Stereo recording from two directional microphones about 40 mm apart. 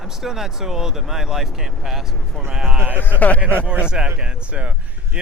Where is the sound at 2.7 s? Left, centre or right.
Right.